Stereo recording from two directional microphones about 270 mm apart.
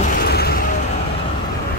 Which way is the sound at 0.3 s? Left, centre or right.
Left.